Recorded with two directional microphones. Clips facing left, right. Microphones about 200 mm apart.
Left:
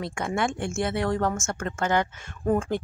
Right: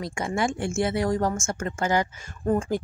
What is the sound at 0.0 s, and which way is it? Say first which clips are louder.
Speech: right 1 dB; centre (ahead or behind).